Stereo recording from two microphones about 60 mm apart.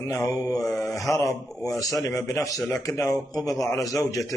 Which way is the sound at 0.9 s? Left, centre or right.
Left.